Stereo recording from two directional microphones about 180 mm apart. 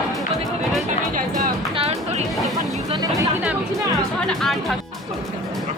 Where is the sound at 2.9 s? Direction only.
20° right (ahead or behind).